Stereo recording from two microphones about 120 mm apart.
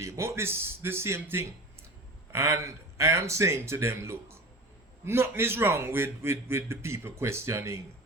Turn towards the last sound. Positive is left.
turn(degrees=-25)  # may be behind; listen again after turning